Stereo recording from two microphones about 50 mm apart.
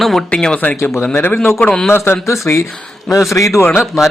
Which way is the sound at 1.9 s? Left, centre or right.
Left.